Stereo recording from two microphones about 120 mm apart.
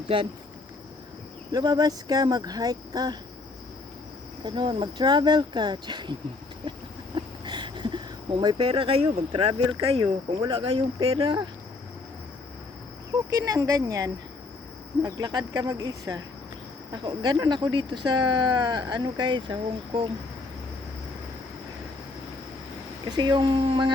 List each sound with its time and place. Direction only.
1.5 s speech: 35° right (ahead or behind)
4.4 s speech: 40° right (ahead or behind)
7.4 s a sound: 40° right (ahead or behind)
9.3 s speech: 45° right (ahead or behind)
13.3 s speech: 30° right (ahead or behind)
23.0 s speech: 35° right (ahead or behind)